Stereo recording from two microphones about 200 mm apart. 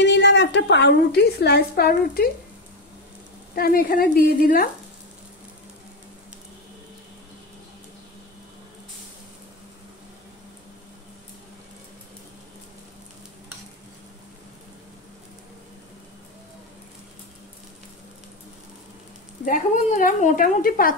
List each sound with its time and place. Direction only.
0.0 s a woman's voice: 65° left (ahead or behind)
3.5 s a woman's voice: 50° left (ahead or behind)
19.4 s a woman's voice: 40° left (ahead or behind)